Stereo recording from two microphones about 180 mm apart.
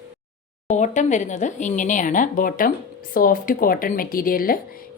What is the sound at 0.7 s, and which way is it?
Speech, 40° left (ahead or behind).